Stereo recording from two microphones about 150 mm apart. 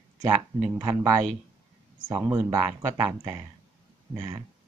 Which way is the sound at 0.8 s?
25° right (ahead or behind).